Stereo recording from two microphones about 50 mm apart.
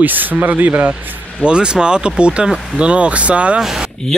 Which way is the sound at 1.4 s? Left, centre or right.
Centre.